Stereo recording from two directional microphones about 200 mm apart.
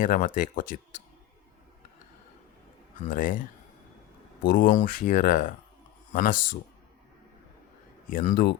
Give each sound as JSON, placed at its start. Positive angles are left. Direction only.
{"t": 0.0, "sound": "speech", "side_deg": 40}
{"t": 3.1, "sound": "speech", "side_deg": 40}
{"t": 4.4, "sound": "speech", "side_deg": 45}
{"t": 8.1, "sound": "speech", "side_deg": 40}